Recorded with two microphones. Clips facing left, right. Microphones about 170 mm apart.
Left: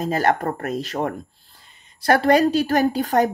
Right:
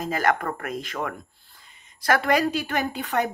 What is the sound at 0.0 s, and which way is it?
Speech, 30° left (ahead or behind).